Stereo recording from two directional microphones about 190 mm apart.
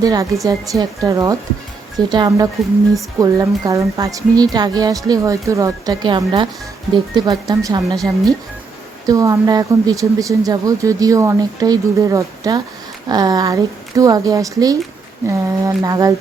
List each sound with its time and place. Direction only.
0.0 s speech: 20° right (ahead or behind)
9.0 s speech: 15° right (ahead or behind)